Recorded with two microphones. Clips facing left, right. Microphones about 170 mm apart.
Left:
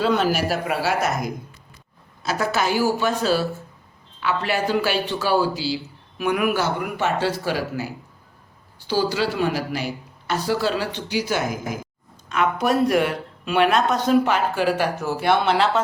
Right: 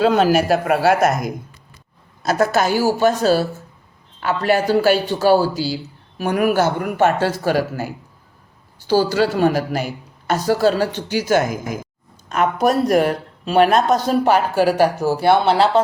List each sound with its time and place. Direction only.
0.0 s a man's voice: 45° right (ahead or behind)
2.2 s a man's voice: 45° right (ahead or behind)